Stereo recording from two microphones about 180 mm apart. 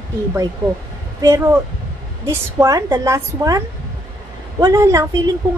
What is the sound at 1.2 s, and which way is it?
A woman's voice, 20° right (ahead or behind).